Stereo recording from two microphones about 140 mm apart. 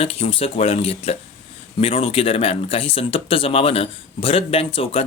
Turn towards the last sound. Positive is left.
turn(degrees=40)  # may be behind; listen again after turning